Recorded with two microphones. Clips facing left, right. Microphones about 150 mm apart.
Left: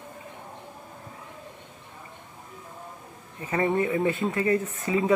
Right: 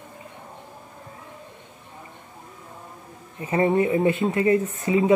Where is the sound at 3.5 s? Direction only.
25° right (ahead or behind).